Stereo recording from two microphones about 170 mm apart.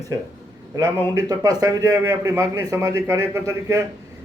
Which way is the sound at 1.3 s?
20° right (ahead or behind).